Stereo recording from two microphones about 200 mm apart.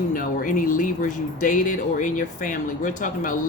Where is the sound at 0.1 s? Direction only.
45° left (ahead or behind).